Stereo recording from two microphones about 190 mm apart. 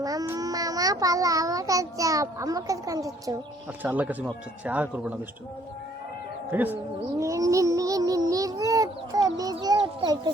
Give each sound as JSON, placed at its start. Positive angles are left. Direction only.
{"t": 0.0, "sound": "child singing", "side_deg": -20}
{"t": 6.5, "sound": "child singing", "side_deg": -10}